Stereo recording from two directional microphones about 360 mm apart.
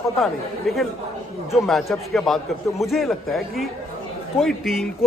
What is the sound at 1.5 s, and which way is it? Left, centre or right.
Speech, centre.